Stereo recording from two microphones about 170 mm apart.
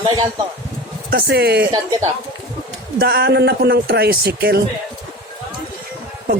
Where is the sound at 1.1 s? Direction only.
75° right (ahead or behind).